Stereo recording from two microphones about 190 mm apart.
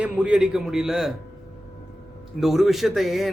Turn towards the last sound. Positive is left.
turn(degrees=0)  # may be behind; listen again after turning